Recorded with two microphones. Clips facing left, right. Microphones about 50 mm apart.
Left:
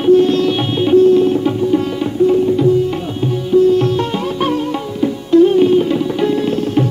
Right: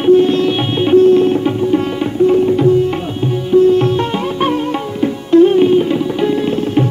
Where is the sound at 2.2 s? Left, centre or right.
Right.